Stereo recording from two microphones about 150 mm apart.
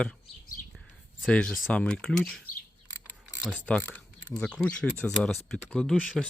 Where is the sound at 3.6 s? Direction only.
10° left (ahead or behind).